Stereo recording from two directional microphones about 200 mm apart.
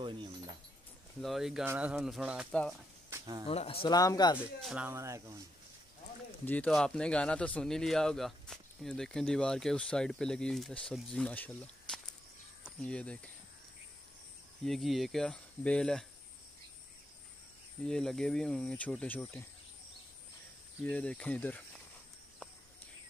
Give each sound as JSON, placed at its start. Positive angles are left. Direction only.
{"t": 1.2, "sound": "speech", "side_deg": 0}
{"t": 3.1, "sound": "a sound", "side_deg": -20}
{"t": 3.4, "sound": "speech", "side_deg": 30}
{"t": 3.8, "sound": "speech", "side_deg": 20}
{"t": 4.4, "sound": "speech", "side_deg": -5}
{"t": 6.4, "sound": "speech", "side_deg": 5}
{"t": 14.6, "sound": "speech", "side_deg": 0}
{"t": 17.8, "sound": "speech", "side_deg": 5}
{"t": 20.9, "sound": "speech", "side_deg": 5}